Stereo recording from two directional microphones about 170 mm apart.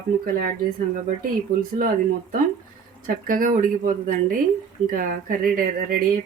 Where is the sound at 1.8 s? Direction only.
50° right (ahead or behind).